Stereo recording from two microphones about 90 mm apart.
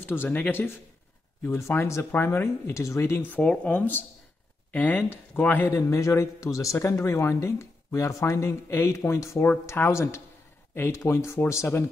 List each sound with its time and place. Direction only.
0.0 s speech: 25° left (ahead or behind)
3.3 s speech: 15° left (ahead or behind)
5.7 s speech: 35° left (ahead or behind)